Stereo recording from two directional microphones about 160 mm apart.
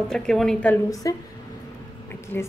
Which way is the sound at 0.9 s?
20° left (ahead or behind).